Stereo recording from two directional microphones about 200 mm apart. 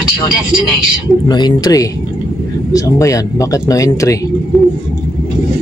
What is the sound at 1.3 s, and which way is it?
Speech, 20° left (ahead or behind).